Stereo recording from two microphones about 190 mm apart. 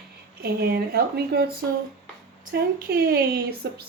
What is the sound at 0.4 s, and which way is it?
Speech, 55° right (ahead or behind).